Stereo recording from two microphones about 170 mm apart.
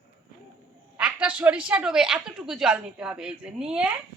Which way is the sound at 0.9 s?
5° right (ahead or behind).